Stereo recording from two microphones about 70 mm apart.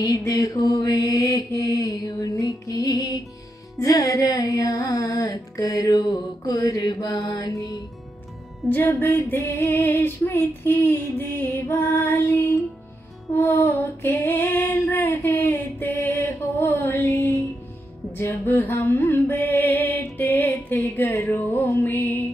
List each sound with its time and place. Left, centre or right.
0.0 s music: left
7.5 s music: left
8.6 s a sound: left
9.5 s music: left
11.6 s music: left
15.3 s a sound: left
18.9 s music: left
21.3 s music: left
21.8 s a sound: left